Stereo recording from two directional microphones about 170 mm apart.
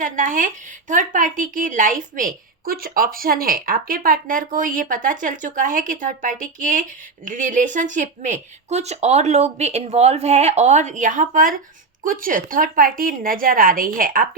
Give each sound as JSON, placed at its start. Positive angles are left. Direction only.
{"t": 0.0, "sound": "a woman's voice", "side_deg": -50}